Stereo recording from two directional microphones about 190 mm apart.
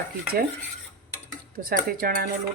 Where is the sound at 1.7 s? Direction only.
50° right (ahead or behind).